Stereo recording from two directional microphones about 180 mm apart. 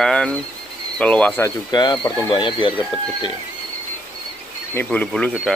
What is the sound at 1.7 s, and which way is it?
Speech, 20° left (ahead or behind).